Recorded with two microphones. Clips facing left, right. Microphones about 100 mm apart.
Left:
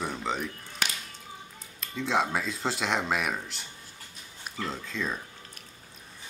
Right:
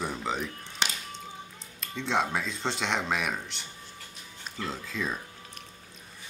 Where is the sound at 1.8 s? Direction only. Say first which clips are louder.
Left 1 dB; centre (ahead or behind).